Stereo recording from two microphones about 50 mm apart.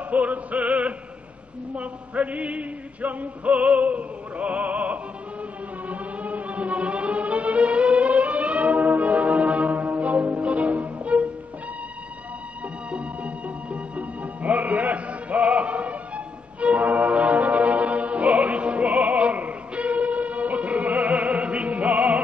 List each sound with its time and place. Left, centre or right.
0.1 s music: right
1.8 s male singing: right
5.9 s music: right
12.9 s music: right